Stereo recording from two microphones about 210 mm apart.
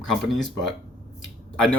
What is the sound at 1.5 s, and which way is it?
Speech, 5° left (ahead or behind).